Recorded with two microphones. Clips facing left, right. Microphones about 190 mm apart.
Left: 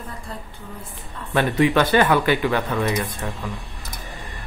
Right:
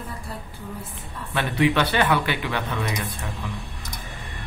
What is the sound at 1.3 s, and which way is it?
Speech, 45° left (ahead or behind).